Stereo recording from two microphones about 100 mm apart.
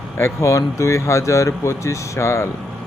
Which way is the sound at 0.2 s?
30° left (ahead or behind).